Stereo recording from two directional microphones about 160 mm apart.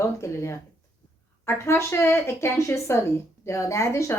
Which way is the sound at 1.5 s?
15° left (ahead or behind).